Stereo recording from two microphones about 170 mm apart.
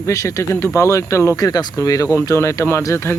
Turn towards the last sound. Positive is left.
turn(degrees=15)  # may be behind; listen again after turning